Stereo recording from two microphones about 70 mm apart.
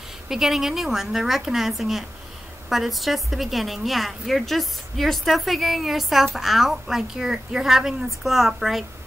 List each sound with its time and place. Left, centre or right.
0.3 s a woman's voice: centre